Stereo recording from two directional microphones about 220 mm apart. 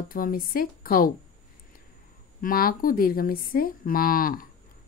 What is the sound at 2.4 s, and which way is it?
Speech, 40° left (ahead or behind).